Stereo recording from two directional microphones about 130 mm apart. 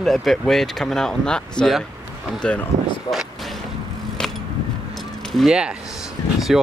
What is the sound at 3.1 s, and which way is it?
Speech, 35° left (ahead or behind).